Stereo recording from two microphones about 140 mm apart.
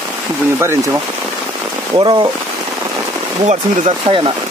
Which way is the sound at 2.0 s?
35° right (ahead or behind).